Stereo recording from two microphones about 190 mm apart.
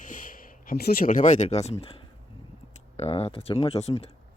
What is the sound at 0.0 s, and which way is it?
Speech, 45° left (ahead or behind).